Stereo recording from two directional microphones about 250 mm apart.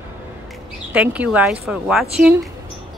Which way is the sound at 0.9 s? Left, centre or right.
Centre.